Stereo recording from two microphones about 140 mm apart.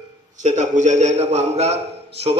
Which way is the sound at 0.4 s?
60° right (ahead or behind).